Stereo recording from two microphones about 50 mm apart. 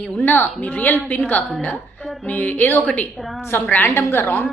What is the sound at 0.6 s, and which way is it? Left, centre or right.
A woman's voice, left.